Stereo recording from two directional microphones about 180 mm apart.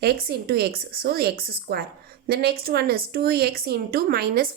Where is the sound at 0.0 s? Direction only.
60° right (ahead or behind).